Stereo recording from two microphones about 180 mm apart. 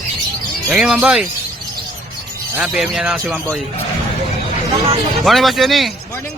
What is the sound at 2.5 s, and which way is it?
A man's voice, 5° right (ahead or behind).